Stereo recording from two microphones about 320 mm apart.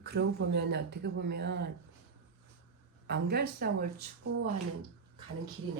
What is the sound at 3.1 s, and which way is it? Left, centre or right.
Speech, right.